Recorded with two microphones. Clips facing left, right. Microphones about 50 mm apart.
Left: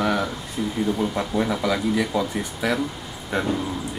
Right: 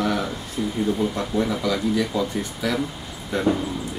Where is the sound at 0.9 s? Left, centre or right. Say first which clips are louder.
Even; centre.